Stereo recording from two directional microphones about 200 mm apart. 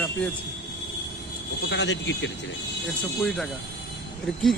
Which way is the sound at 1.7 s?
65° left (ahead or behind).